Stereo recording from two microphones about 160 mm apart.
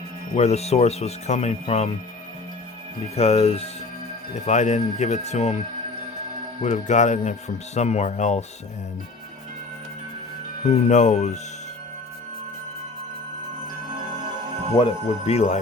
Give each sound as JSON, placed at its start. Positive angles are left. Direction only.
{"t": 0.3, "sound": "speech", "side_deg": 40}
{"t": 3.2, "sound": "speech", "side_deg": 40}
{"t": 6.6, "sound": "speech", "side_deg": 45}
{"t": 10.7, "sound": "speech", "side_deg": 45}
{"t": 14.7, "sound": "speech", "side_deg": 35}